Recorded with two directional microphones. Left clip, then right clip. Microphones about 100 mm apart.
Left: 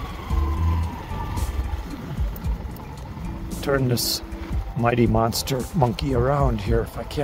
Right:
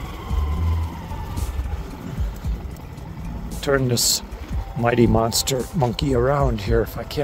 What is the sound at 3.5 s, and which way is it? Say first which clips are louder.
Speech: right 3 dB; 40° right (ahead or behind).